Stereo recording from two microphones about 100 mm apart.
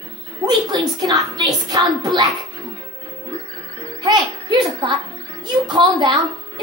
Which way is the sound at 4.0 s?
45° right (ahead or behind).